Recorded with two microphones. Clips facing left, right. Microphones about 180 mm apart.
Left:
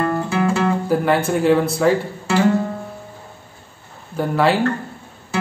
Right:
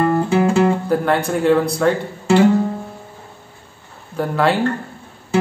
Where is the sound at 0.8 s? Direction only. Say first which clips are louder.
Even; centre (ahead or behind).